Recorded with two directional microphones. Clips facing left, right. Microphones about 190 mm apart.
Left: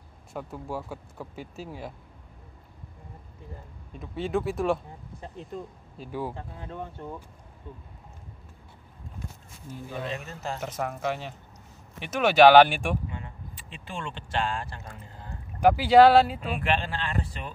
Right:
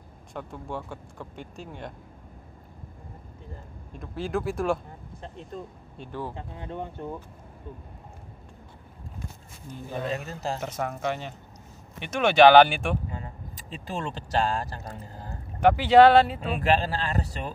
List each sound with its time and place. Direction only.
0.3 s speech: 5° left (ahead or behind)
3.9 s speech: centre (ahead or behind)
5.9 s speech: 10° left (ahead or behind)
6.3 s speech: 20° right (ahead or behind)
9.8 s speech: 40° right (ahead or behind)
10.6 s speech: centre (ahead or behind)
13.1 s speech: 40° right (ahead or behind)
15.6 s speech: 5° left (ahead or behind)
16.5 s speech: 40° right (ahead or behind)